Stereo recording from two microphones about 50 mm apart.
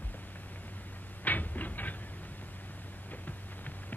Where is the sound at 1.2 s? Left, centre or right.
Left.